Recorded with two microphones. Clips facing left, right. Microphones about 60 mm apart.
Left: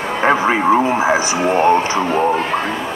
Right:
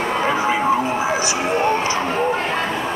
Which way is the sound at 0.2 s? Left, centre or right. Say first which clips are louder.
Left 7 dB; left.